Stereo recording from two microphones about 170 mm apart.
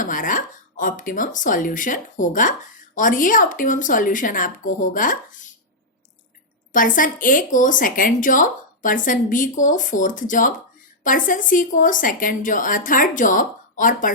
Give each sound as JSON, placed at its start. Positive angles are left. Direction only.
{"t": 0.0, "sound": "speech", "side_deg": 50}
{"t": 6.7, "sound": "speech", "side_deg": 50}